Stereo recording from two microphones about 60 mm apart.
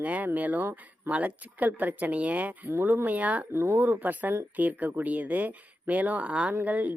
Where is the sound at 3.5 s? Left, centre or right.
Right.